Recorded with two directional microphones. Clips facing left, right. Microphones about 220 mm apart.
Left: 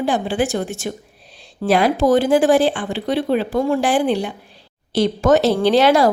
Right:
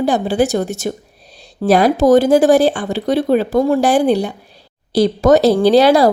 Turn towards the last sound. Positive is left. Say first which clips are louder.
# right 4 dB
turn(degrees=-35)  # may be behind; listen again after turning